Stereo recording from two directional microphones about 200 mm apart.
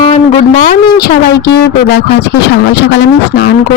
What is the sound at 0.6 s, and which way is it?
Speech, 45° left (ahead or behind).